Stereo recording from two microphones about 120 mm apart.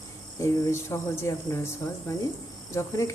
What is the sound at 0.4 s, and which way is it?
Speech, 25° left (ahead or behind).